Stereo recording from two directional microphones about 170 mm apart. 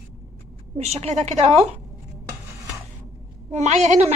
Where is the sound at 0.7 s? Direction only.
40° right (ahead or behind).